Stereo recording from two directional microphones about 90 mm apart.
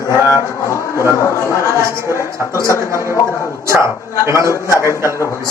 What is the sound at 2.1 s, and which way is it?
A man's voice, 30° right (ahead or behind).